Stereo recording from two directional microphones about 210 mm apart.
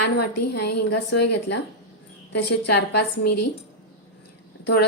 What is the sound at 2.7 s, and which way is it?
Speech, 50° left (ahead or behind).